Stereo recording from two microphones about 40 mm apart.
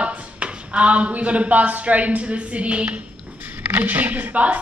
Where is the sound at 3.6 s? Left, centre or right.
Right.